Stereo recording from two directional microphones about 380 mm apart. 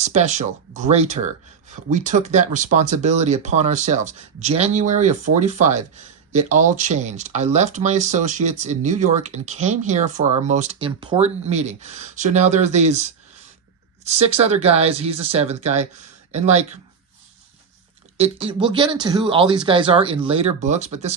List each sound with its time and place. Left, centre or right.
0.0 s speech: centre
18.2 s speech: centre